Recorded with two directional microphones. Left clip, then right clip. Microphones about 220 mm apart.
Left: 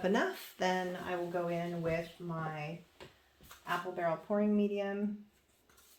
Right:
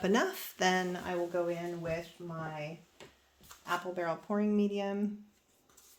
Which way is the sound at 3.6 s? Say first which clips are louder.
Even; 45° right (ahead or behind).